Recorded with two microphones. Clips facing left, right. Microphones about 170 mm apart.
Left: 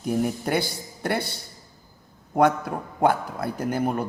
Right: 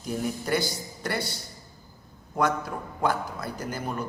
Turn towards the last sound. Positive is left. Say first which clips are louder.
# left 8 dB
turn(degrees=60)  # may be behind; listen again after turning